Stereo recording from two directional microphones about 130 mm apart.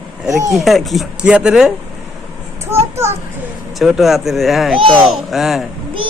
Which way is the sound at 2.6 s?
20° right (ahead or behind).